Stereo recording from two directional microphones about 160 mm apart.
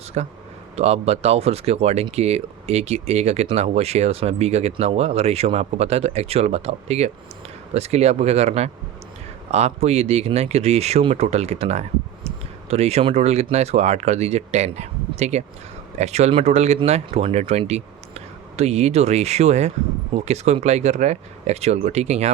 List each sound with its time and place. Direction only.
0.2 s speech: 45° right (ahead or behind)